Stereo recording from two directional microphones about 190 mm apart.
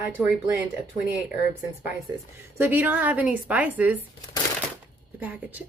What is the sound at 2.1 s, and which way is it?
Speech, 20° right (ahead or behind).